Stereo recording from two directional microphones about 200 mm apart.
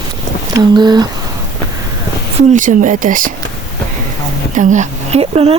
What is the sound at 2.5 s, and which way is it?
Speech, 40° right (ahead or behind).